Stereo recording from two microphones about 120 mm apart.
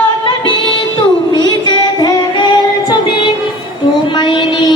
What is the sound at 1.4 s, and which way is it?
Child singing, 35° left (ahead or behind).